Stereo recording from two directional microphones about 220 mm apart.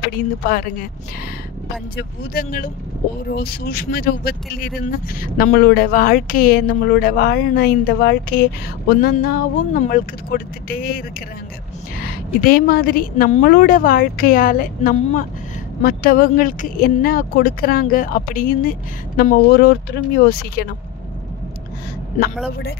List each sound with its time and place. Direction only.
2.0 s a woman's voice: 40° left (ahead or behind)